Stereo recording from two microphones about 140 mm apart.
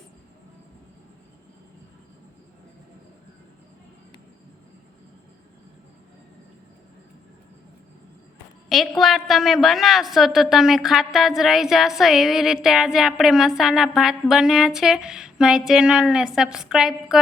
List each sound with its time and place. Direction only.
9.0 s a woman's voice: centre (ahead or behind)